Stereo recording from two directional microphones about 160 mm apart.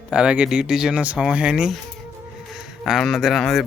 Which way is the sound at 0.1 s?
5° right (ahead or behind).